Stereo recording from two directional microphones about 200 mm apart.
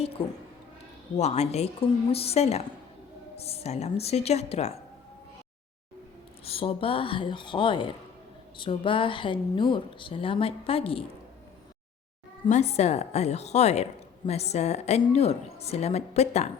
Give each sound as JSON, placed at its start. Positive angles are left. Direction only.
{"t": 0.0, "sound": "a woman's voice", "side_deg": 30}
{"t": 6.4, "sound": "a woman's voice", "side_deg": 30}
{"t": 12.5, "sound": "a woman's voice", "side_deg": 35}